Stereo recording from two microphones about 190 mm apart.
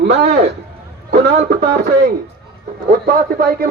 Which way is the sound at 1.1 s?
50° right (ahead or behind).